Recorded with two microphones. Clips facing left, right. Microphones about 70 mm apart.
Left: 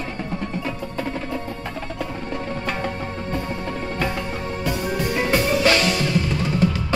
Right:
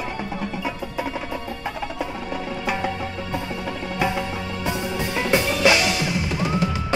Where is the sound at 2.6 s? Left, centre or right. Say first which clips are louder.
Right 1 dB; centre.